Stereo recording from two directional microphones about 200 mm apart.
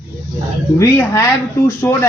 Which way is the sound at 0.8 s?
15° left (ahead or behind).